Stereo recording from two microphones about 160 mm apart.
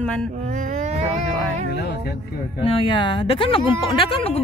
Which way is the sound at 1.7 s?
90° left.